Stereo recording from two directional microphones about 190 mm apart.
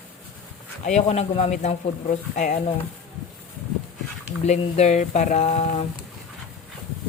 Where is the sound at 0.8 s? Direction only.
35° left (ahead or behind).